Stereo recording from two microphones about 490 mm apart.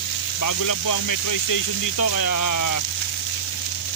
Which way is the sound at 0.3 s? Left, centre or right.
Left.